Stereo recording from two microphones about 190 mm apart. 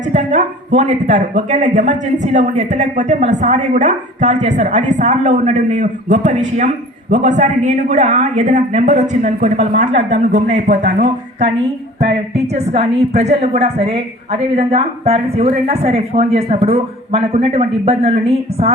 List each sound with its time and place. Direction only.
0.1 s speech: 40° right (ahead or behind)
12.5 s speech: 35° right (ahead or behind)